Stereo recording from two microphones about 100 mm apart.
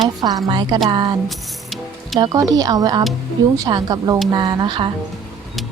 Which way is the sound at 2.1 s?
40° right (ahead or behind).